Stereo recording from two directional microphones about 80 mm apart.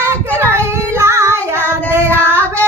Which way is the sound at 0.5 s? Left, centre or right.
Right.